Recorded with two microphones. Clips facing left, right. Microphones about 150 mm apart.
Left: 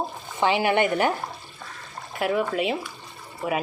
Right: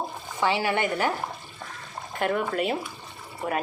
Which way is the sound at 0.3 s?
20° left (ahead or behind).